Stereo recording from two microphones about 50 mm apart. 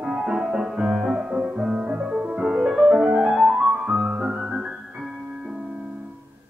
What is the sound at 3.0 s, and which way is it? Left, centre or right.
Music, right.